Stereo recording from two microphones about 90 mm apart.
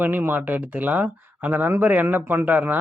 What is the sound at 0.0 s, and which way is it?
Speech, 20° right (ahead or behind).